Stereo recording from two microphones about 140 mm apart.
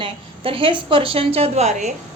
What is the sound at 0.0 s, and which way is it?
A woman's voice, 40° right (ahead or behind).